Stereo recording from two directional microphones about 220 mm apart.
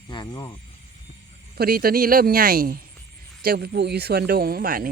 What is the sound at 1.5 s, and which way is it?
Speech, 45° right (ahead or behind).